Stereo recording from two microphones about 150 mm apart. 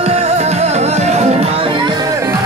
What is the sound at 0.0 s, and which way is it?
Music, 45° right (ahead or behind).